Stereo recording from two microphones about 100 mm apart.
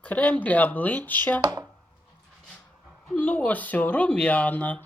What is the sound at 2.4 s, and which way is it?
Speech, 10° left (ahead or behind).